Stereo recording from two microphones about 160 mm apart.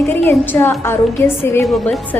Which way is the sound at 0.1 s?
10° left (ahead or behind).